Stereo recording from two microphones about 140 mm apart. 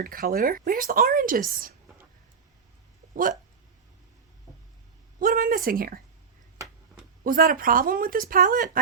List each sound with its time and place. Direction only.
0.0 s speech: 90° right
5.2 s speech: 80° right
7.3 s speech: 90° right; by 8.8 s 75° right (ahead or behind)